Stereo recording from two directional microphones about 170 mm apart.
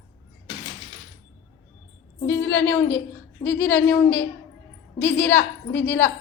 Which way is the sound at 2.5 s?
10° left (ahead or behind).